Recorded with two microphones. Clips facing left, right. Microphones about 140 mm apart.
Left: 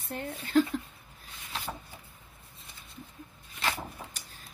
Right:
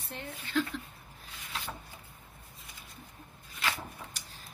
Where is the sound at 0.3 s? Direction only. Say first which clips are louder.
Left 7 dB; 40° left (ahead or behind).